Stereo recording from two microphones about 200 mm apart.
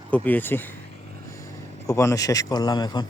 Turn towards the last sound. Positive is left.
turn(degrees=20)  # may be behind; listen again after turning